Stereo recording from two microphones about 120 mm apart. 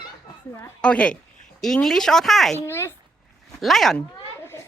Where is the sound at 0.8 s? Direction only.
10° left (ahead or behind).